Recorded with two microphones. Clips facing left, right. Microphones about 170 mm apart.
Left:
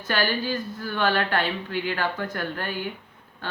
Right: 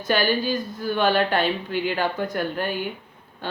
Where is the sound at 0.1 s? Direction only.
15° right (ahead or behind).